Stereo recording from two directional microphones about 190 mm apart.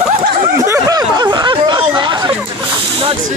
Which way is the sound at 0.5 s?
15° right (ahead or behind).